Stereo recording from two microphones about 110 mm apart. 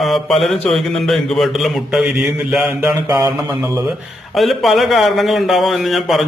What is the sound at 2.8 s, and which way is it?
Mantra, 30° right (ahead or behind).